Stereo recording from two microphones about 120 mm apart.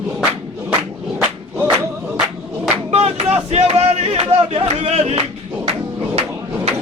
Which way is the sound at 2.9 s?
60° right (ahead or behind).